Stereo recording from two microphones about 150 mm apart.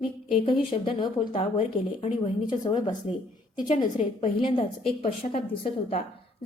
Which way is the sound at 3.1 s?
45° left (ahead or behind).